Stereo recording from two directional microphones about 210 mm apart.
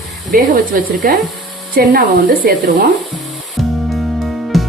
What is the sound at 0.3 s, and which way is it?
Speech, 40° right (ahead or behind).